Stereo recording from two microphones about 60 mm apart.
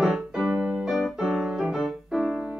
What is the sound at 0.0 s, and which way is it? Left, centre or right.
Music, centre.